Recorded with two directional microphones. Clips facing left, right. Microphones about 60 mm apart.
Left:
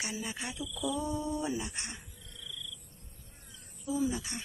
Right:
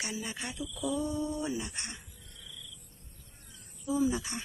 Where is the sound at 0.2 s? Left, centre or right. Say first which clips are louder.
Even; centre.